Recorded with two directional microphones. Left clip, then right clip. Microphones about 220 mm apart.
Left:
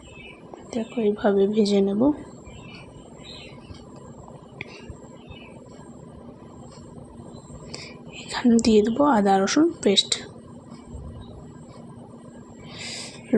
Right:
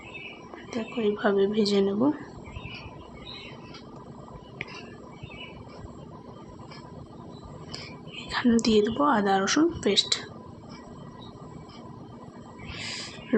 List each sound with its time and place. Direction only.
0.7 s a woman's voice: 15° left (ahead or behind)
7.7 s a woman's voice: 25° left (ahead or behind)
12.8 s a sound: 20° left (ahead or behind)